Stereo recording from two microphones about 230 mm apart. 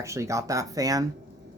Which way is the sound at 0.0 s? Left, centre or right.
Centre.